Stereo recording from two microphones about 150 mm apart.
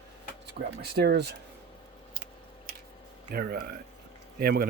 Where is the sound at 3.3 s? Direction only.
90° right.